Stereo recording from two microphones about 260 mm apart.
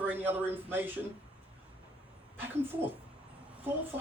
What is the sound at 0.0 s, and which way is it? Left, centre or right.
Speech, centre.